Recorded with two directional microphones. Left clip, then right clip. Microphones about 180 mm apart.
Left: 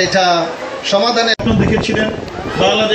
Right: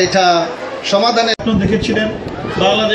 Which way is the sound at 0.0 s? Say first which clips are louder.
Right 1 dB; 35° left (ahead or behind).